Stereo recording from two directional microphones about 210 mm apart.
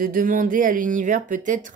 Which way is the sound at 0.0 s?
40° right (ahead or behind).